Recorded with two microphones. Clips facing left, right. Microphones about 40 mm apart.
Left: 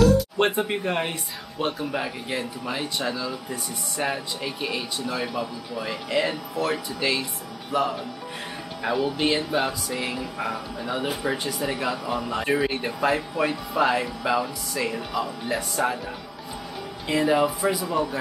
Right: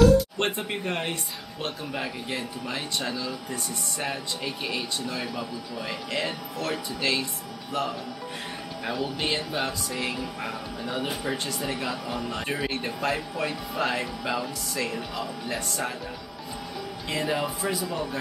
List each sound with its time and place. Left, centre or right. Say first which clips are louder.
0.4 s speech: left 5 dB; centre
8.9 s speech: left 5 dB; centre
17.1 s speech: left 7 dB; centre